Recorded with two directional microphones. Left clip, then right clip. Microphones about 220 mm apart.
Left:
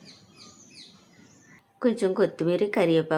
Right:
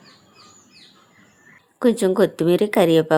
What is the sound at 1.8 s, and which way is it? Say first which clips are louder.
A woman's voice: right 6 dB; 30° right (ahead or behind).